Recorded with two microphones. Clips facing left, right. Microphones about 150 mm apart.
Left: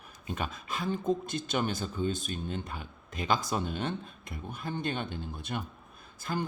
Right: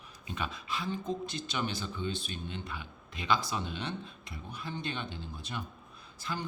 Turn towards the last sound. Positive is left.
turn(degrees=50)  # may be behind; listen again after turning